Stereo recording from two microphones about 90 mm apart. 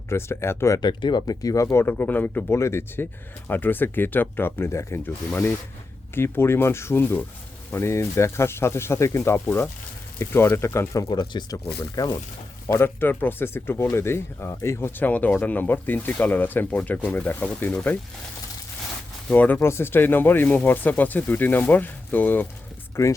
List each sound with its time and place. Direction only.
0.1 s speech: 30° left (ahead or behind)
0.8 s speech: 55° left (ahead or behind); by 11.0 s 30° left (ahead or behind)
11.1 s speech: 55° left (ahead or behind)
11.8 s speech: 40° left (ahead or behind)
12.6 s speech: 30° left (ahead or behind)
19.3 s speech: 20° left (ahead or behind)
23.0 s speech: 35° left (ahead or behind)